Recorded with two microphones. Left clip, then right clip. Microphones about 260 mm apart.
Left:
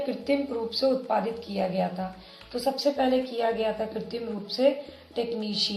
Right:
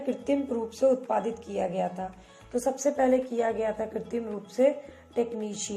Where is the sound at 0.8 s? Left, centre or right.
Right.